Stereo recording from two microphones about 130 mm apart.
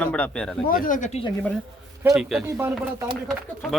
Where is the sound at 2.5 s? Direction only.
20° right (ahead or behind).